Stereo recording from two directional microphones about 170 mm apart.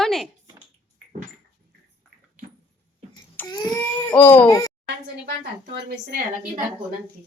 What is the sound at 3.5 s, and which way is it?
Baby cry, 20° left (ahead or behind).